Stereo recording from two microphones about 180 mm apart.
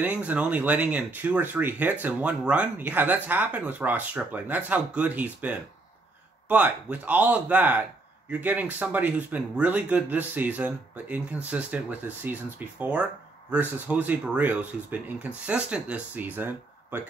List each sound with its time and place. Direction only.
0.0 s speech: 10° right (ahead or behind)